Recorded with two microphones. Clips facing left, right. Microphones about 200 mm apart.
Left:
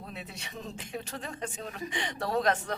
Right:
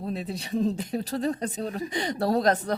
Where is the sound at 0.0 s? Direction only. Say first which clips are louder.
Right 11 dB; 35° right (ahead or behind).